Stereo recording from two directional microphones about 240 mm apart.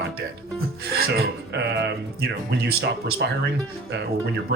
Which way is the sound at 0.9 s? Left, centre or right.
Right.